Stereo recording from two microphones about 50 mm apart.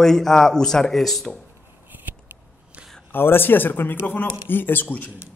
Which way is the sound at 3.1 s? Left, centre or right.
Left.